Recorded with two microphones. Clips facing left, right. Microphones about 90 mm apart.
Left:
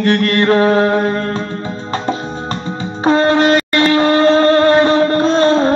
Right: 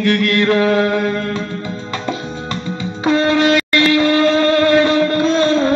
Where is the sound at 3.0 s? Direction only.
35° left (ahead or behind).